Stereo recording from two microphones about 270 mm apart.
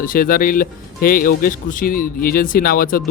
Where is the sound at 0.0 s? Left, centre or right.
Left.